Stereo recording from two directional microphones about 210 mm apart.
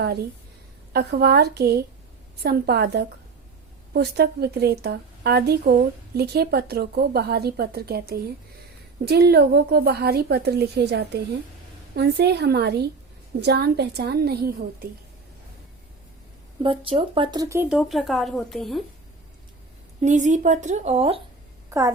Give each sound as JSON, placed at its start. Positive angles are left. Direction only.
{"t": 0.9, "sound": "a woman's voice", "side_deg": -50}
{"t": 16.6, "sound": "speech", "side_deg": -25}
{"t": 20.0, "sound": "a woman's voice", "side_deg": -35}
{"t": 21.7, "sound": "speech", "side_deg": -15}